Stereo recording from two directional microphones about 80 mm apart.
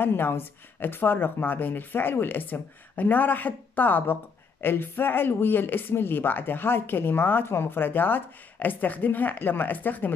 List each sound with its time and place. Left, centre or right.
0.0 s a woman's voice: left